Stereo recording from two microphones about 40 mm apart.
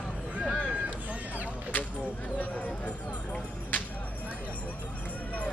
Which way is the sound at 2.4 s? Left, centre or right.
Left.